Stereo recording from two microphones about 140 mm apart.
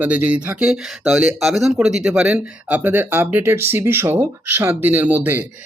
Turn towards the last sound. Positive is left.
turn(degrees=-10)  # may be behind; listen again after turning